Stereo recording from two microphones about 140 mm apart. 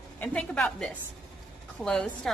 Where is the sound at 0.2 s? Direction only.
5° left (ahead or behind).